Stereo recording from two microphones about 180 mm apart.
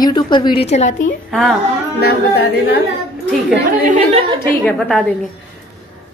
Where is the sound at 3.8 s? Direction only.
35° right (ahead or behind).